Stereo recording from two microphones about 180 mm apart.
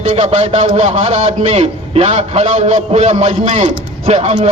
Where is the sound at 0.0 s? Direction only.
35° right (ahead or behind).